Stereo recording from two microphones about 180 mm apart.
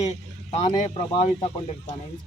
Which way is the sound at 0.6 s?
40° left (ahead or behind).